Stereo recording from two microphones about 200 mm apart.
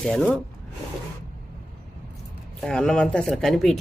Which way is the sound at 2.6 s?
5° left (ahead or behind).